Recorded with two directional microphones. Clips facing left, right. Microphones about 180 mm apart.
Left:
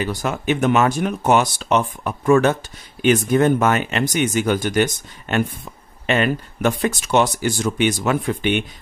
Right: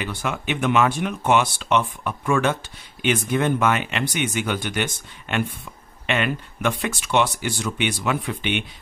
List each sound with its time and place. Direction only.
0.0 s speech: 40° left (ahead or behind)